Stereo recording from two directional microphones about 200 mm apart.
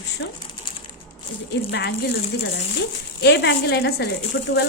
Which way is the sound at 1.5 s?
60° left (ahead or behind).